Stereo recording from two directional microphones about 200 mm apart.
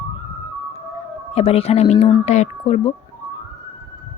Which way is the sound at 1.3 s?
30° left (ahead or behind).